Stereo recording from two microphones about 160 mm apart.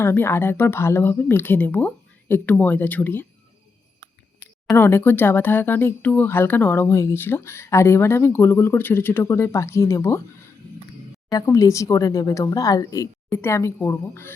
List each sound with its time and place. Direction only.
0.0 s speech: 15° left (ahead or behind)
4.8 s speech: 15° left (ahead or behind)
11.3 s speech: 20° left (ahead or behind)